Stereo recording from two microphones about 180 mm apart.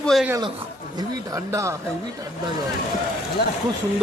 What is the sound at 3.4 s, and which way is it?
Speech, 65° left (ahead or behind).